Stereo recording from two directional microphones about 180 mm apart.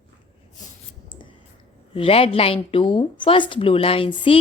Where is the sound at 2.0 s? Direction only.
30° left (ahead or behind).